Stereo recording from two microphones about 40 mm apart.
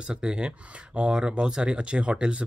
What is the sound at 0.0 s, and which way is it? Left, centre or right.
Speech, right.